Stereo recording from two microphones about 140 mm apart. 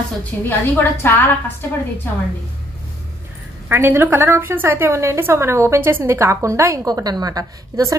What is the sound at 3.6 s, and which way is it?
A woman's voice, 15° right (ahead or behind).